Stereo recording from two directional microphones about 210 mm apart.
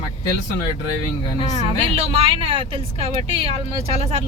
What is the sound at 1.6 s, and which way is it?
Speech, 25° right (ahead or behind).